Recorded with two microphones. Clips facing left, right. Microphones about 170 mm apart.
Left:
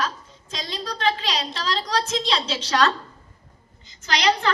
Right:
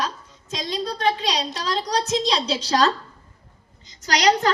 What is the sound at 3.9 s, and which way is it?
Female singing, 40° right (ahead or behind).